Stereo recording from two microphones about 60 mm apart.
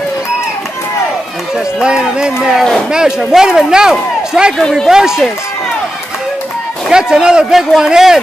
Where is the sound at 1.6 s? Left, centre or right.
Centre.